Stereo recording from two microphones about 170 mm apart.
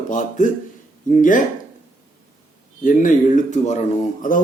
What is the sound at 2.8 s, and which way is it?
Speech, 50° left (ahead or behind).